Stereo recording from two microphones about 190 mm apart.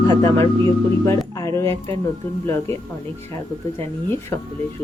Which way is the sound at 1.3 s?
15° left (ahead or behind).